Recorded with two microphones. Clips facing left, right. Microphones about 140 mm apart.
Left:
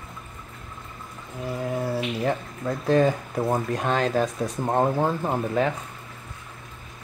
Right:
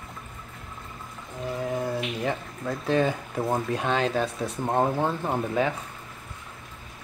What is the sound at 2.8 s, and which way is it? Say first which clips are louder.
Speech: left 4 dB; 35° left (ahead or behind).